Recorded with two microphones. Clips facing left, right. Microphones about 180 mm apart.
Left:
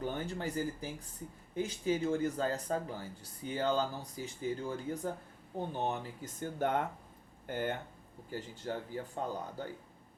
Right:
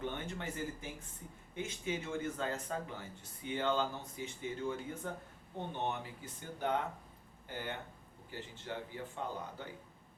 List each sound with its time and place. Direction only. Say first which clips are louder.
0.0 s speech: left 4 dB; 35° left (ahead or behind)